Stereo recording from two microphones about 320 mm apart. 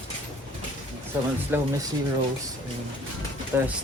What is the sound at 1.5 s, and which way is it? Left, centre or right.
Speech, centre.